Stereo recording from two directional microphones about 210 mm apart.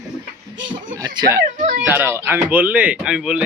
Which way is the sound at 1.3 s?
40° right (ahead or behind).